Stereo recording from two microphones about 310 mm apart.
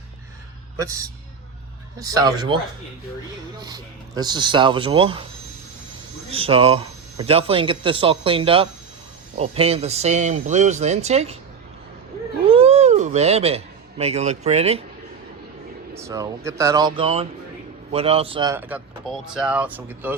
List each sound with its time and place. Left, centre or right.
0.8 s speech: centre
3.6 s speech: centre
6.3 s speech: centre
12.5 s cat: centre
14.0 s speech: right
16.0 s speech: centre